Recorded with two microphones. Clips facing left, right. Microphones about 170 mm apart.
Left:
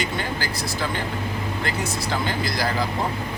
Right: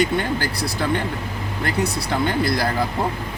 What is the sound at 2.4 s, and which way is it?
Speech, 60° right (ahead or behind).